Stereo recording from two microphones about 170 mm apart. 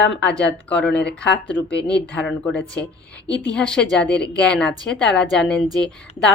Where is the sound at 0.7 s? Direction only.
5° left (ahead or behind).